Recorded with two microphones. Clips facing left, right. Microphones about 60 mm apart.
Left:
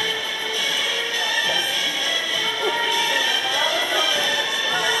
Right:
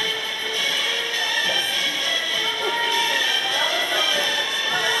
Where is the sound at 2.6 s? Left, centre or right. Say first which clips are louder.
Left 1 dB; centre.